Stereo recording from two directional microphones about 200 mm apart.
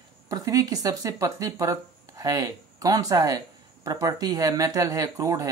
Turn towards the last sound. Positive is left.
turn(degrees=-15)  # may be behind; listen again after turning